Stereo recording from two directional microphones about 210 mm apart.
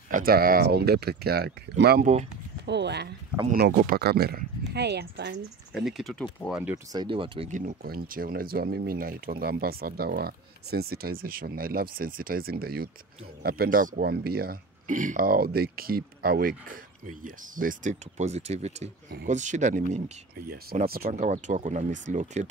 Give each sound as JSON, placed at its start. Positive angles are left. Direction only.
{"t": 0.1, "sound": "speech", "side_deg": -45}
{"t": 5.7, "sound": "speech", "side_deg": 0}
{"t": 6.6, "sound": "speech", "side_deg": -15}
{"t": 20.4, "sound": "speech", "side_deg": -45}